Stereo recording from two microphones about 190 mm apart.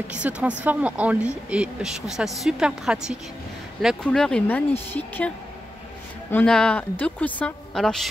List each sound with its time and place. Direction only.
0.1 s a woman's voice: 5° right (ahead or behind); by 5.3 s 10° left (ahead or behind)
6.3 s speech: 5° left (ahead or behind)